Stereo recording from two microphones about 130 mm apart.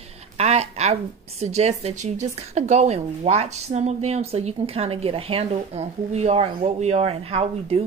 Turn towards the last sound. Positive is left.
turn(degrees=-50)  # may be behind; listen again after turning